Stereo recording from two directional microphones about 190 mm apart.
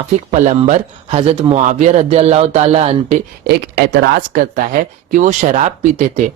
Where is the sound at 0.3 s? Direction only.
35° right (ahead or behind).